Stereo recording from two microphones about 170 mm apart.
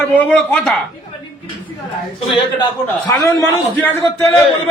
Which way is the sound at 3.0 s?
15° left (ahead or behind).